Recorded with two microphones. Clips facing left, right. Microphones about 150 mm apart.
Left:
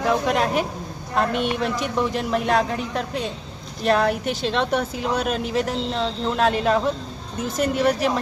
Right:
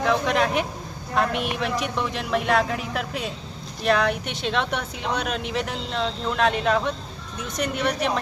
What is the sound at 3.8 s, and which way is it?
Speech, 40° left (ahead or behind).